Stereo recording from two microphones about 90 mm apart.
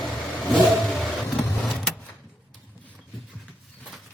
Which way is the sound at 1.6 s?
5° left (ahead or behind).